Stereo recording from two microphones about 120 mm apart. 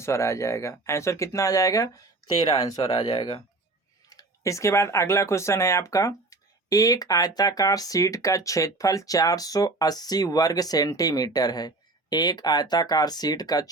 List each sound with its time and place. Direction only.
0.0 s speech: 25° left (ahead or behind); by 3.4 s 45° left (ahead or behind)
4.1 s speech: 30° left (ahead or behind)